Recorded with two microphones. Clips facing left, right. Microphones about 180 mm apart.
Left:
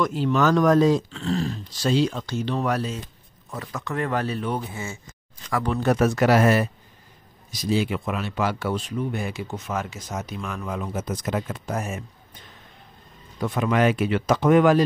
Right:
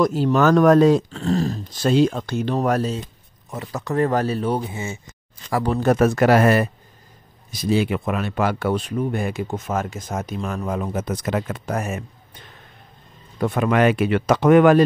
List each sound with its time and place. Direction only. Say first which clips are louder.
0.0 s speech: right 4 dB; 40° right (ahead or behind); by 1.0 s 65° right (ahead or behind)
1.1 s speech: right 4 dB; 45° right (ahead or behind)
3.4 s speech: right 4 dB; 25° right (ahead or behind)
4.6 s speech: right 4 dB; 20° right (ahead or behind)
5.5 s speech: right 4 dB; 30° right (ahead or behind)
5.8 s speech: right 3 dB; 50° right (ahead or behind); by 12.0 s 65° right (ahead or behind)
13.4 s speech: right 3 dB; 55° right (ahead or behind)